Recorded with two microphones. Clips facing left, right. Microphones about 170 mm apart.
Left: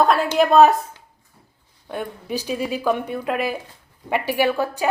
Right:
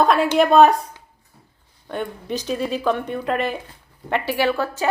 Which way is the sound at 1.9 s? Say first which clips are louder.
Right 1 dB; 5° left (ahead or behind).